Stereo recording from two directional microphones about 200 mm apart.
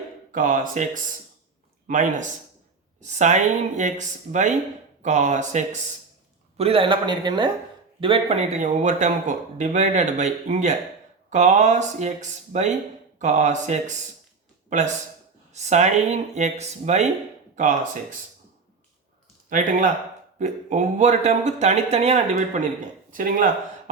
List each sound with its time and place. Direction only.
0.3 s speech: 40° right (ahead or behind)
6.6 s a man's voice: 25° right (ahead or behind)
19.5 s speech: 40° right (ahead or behind)
23.1 s speech: 40° right (ahead or behind)